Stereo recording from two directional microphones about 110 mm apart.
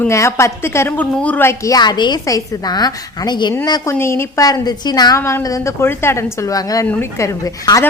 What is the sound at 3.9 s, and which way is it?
Speech, 25° left (ahead or behind).